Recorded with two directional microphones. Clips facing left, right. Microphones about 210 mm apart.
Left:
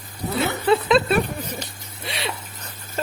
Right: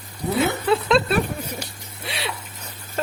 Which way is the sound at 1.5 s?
5° right (ahead or behind).